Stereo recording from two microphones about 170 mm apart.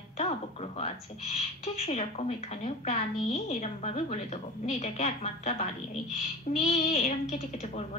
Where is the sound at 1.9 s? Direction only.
35° left (ahead or behind).